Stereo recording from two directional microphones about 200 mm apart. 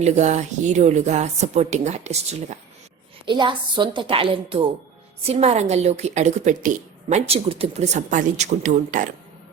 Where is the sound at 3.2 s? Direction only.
25° right (ahead or behind); by 9.1 s 40° right (ahead or behind).